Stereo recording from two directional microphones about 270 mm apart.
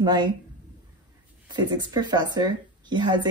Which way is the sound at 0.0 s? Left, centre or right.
Centre.